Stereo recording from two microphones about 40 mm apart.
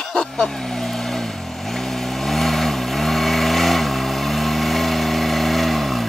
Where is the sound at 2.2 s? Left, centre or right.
Centre.